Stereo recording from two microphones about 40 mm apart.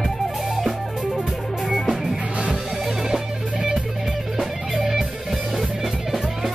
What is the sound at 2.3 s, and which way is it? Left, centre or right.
Music, right.